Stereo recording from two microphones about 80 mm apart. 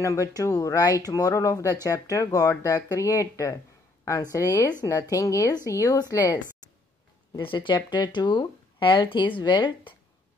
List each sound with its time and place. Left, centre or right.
0.0 s speech: left
7.3 s speech: left